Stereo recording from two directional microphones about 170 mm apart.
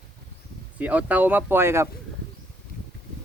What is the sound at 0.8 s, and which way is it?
Speech, 10° right (ahead or behind).